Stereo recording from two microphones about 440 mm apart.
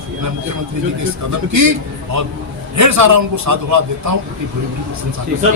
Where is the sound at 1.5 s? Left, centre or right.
Right.